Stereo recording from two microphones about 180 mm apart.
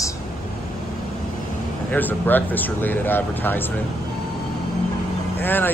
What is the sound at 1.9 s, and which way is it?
Speech, 10° left (ahead or behind).